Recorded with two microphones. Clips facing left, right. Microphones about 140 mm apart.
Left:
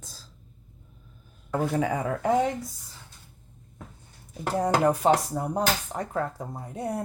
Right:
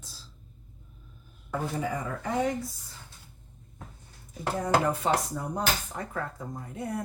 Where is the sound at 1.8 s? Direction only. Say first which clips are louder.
Left 4 dB; 70° left (ahead or behind).